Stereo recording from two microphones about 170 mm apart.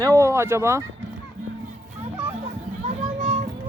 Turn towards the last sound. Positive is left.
turn(degrees=-45)  # may be behind; listen again after turning